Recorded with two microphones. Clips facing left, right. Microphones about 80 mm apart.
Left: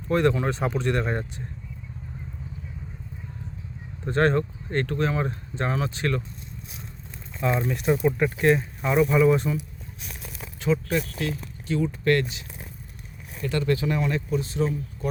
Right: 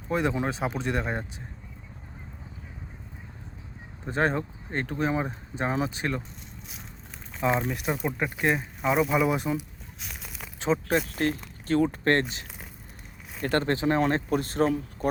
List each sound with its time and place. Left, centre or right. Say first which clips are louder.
0.1 s speech: left 4 dB; centre
4.0 s speech: left 4 dB; centre
7.4 s speech: left 2 dB; centre
9.0 s speech: left 7 dB; centre
10.6 s speech: left 1 dB; right
10.9 s speech: right 1 dB; right